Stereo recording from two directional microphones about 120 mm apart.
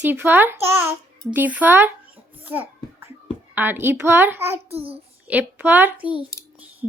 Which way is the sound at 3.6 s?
15° right (ahead or behind).